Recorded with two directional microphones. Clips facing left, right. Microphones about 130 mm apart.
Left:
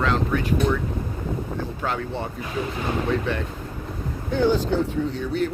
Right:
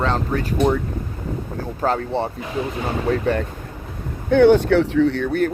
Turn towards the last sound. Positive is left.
turn(degrees=-60)  # may be behind; listen again after turning